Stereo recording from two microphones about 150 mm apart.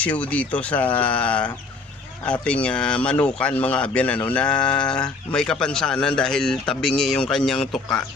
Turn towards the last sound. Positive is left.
turn(degrees=5)  # may be behind; listen again after turning